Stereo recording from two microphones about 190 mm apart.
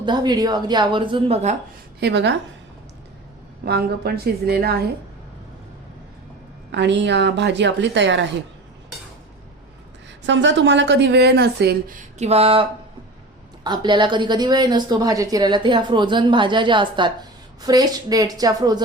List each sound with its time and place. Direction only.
0.0 s a woman's voice: 20° right (ahead or behind)
2.0 s speech: 65° right (ahead or behind)
3.7 s speech: 55° right (ahead or behind)
6.7 s a woman's voice: 65° right (ahead or behind)
10.2 s speech: 70° right (ahead or behind)
12.2 s a sound: 35° right (ahead or behind)
13.7 s a woman's voice: 25° right (ahead or behind)